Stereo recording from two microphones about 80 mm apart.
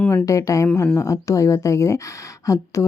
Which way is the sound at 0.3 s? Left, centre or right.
Left.